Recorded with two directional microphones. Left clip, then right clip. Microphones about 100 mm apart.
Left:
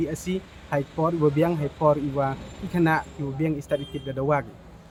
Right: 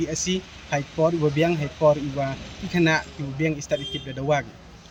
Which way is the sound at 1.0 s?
25° left (ahead or behind).